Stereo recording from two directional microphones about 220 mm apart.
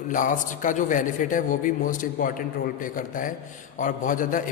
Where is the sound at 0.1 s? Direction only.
35° left (ahead or behind).